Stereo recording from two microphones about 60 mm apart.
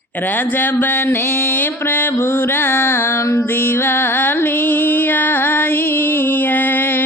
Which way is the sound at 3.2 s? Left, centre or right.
Left.